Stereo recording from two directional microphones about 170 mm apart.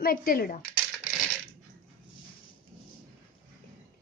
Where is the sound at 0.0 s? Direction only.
60° left (ahead or behind).